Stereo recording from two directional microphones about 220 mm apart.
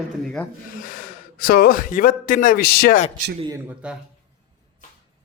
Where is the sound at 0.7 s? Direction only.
40° left (ahead or behind).